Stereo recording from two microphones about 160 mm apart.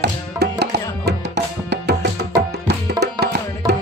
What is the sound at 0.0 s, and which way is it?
Tabla, 90° right.